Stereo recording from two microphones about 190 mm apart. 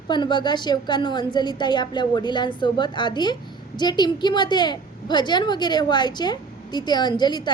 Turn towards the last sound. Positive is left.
turn(degrees=25)  # may be behind; listen again after turning